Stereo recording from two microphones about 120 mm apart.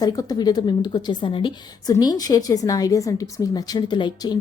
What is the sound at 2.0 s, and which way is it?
A woman's voice, 30° left (ahead or behind).